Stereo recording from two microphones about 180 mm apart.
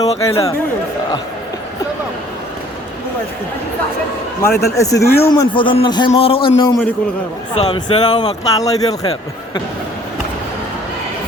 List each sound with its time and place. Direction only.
0.3 s speech: 15° left (ahead or behind)
4.4 s a man's voice: 15° left (ahead or behind)
7.5 s speech: 35° left (ahead or behind)
8.4 s a man's voice: 20° left (ahead or behind)